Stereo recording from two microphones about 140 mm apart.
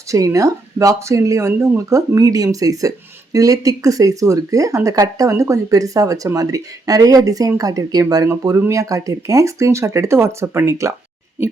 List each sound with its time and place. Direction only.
0.1 s speech: 25° right (ahead or behind)